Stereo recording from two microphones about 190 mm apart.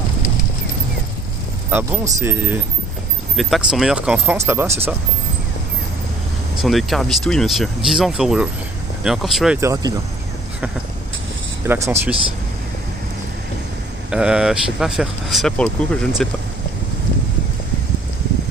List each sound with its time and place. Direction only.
1.7 s speech: 10° right (ahead or behind)
3.3 s speech: centre (ahead or behind)
6.6 s speech: centre (ahead or behind)
9.6 s speech: 15° right (ahead or behind)
11.6 s speech: 10° right (ahead or behind)
14.1 s speech: 5° right (ahead or behind)